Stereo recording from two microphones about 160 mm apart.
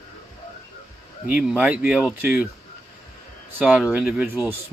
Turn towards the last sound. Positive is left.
turn(degrees=-5)  # may be behind; listen again after turning